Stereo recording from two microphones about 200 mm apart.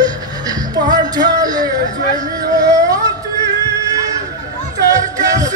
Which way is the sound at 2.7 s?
15° right (ahead or behind).